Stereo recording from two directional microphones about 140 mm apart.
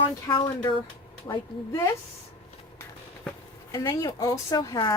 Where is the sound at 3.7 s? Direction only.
25° left (ahead or behind).